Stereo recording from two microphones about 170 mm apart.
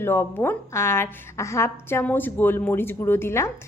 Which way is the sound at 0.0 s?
10° left (ahead or behind).